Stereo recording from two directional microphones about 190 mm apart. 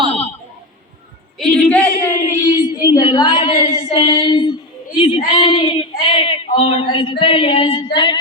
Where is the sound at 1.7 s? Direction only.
5° left (ahead or behind).